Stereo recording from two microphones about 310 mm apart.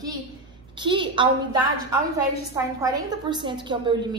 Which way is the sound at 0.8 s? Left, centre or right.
Centre.